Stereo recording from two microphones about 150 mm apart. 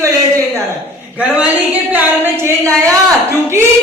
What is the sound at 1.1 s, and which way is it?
A woman's voice, 10° right (ahead or behind).